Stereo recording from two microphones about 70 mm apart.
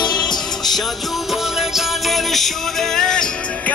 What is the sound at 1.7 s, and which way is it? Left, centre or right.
Music, centre.